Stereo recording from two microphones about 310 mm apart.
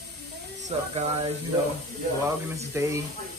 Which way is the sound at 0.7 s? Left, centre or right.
Right.